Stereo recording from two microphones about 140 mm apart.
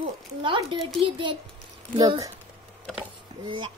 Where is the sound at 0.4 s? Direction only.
35° right (ahead or behind).